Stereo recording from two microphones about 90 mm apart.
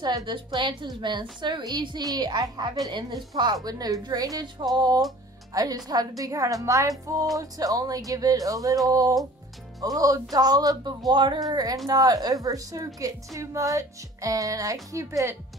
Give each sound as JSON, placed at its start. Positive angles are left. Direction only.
{"t": 0.0, "sound": "a woman's voice", "side_deg": -55}